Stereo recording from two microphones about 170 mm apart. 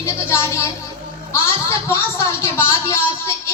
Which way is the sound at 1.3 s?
15° left (ahead or behind).